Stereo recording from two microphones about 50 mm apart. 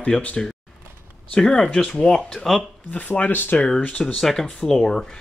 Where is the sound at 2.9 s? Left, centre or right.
Left.